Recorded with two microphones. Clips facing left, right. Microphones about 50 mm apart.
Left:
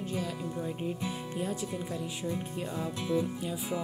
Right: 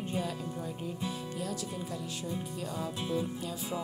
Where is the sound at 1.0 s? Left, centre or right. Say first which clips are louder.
Left 2 dB; left.